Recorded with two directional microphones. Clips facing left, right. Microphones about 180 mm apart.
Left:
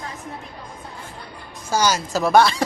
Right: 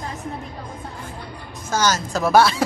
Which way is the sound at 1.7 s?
10° left (ahead or behind).